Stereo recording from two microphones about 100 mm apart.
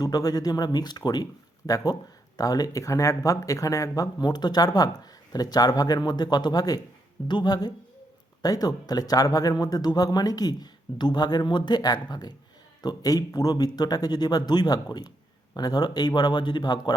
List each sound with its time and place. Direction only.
0.0 s a man's voice: 40° left (ahead or behind)